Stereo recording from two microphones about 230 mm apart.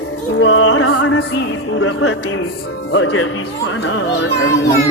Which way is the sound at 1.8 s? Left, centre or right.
Left.